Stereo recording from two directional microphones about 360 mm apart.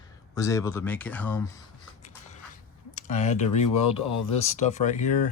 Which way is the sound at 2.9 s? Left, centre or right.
Centre.